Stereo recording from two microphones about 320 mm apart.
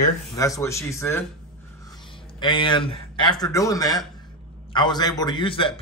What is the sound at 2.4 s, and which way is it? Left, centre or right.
A man's voice, centre.